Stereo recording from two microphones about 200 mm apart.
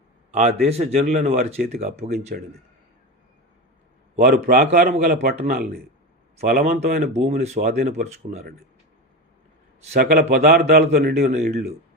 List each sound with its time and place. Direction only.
0.3 s speech: 30° right (ahead or behind)
4.2 s a man's voice: 50° right (ahead or behind)
7.1 s speech: 35° right (ahead or behind)
7.7 s a man's voice: 50° right (ahead or behind)
7.9 s speech: 35° right (ahead or behind)
10.0 s a man's voice: 50° right (ahead or behind)